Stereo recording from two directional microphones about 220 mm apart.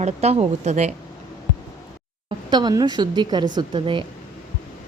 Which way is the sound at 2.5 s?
20° right (ahead or behind).